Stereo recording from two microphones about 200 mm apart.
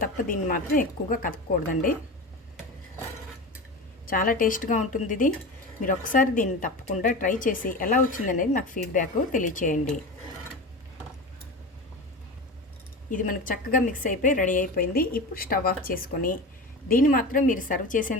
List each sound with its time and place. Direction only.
0.0 s a woman's voice: 45° left (ahead or behind)
4.0 s a woman's voice: 45° left (ahead or behind)
13.1 s a woman's voice: 45° left (ahead or behind)